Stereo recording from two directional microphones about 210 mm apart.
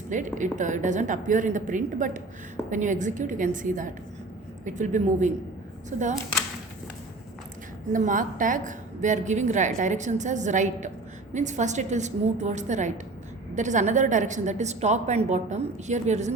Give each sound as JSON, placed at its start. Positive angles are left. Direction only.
{"t": 0.3, "sound": "a woman's voice", "side_deg": -35}
{"t": 7.9, "sound": "a woman's voice", "side_deg": -40}